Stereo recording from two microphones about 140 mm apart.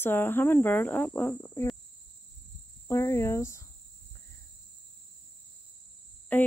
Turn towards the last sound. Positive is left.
turn(degrees=10)  # may be behind; listen again after turning